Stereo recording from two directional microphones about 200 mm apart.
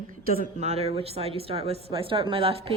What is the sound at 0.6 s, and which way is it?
Speech, 30° right (ahead or behind).